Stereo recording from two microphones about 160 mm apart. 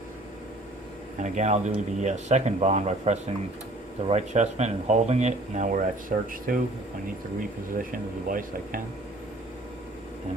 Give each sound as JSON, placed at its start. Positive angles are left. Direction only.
{"t": 1.2, "sound": "speech", "side_deg": -50}
{"t": 7.8, "sound": "speech", "side_deg": -60}